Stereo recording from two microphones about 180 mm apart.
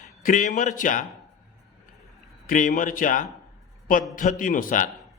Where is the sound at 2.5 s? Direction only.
45° left (ahead or behind).